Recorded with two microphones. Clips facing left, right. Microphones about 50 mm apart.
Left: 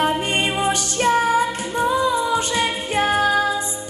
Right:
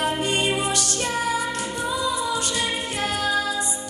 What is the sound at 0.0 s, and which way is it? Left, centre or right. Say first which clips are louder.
Music: left 3 dB; left.